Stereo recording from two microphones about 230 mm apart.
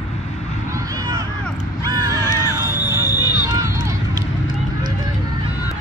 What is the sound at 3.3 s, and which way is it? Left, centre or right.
Run, centre.